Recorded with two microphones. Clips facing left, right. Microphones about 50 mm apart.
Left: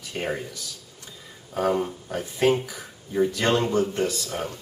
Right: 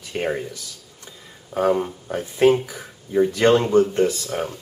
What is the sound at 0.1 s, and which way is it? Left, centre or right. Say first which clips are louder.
Speech: right 5 dB; right.